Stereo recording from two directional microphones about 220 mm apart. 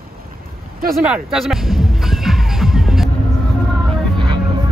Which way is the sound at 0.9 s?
5° right (ahead or behind).